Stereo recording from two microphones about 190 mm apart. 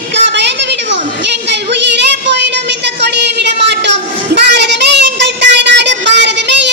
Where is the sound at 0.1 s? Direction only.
65° right (ahead or behind).